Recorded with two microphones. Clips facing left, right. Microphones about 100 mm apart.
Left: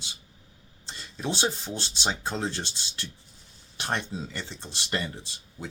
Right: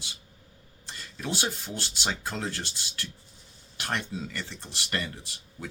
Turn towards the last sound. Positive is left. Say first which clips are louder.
# left 2 dB
turn(degrees=25)  # may be behind; listen again after turning